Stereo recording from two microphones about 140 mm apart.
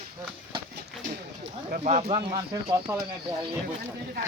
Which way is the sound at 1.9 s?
50° right (ahead or behind).